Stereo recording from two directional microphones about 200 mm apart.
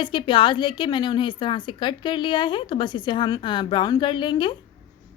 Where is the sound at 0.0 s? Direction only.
25° left (ahead or behind).